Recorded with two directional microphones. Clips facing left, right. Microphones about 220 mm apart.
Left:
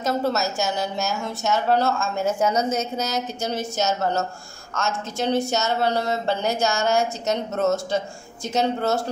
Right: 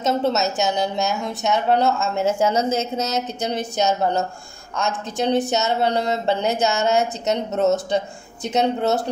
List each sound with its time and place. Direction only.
0.0 s a woman's voice: 20° right (ahead or behind)